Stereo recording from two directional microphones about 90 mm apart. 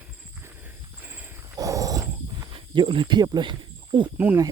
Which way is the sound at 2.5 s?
65° right (ahead or behind).